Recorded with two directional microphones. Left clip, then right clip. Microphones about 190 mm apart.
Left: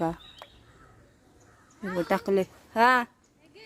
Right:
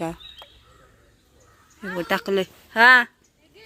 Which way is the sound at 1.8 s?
15° left (ahead or behind).